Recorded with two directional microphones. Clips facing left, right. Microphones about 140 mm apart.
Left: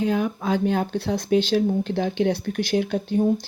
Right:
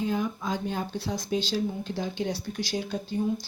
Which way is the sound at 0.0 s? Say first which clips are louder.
Left 6 dB; 70° left (ahead or behind).